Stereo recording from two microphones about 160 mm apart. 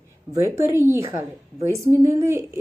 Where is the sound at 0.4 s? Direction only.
15° right (ahead or behind).